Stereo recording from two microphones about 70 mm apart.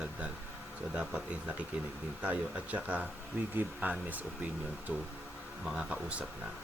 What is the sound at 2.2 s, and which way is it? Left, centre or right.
Speech, right.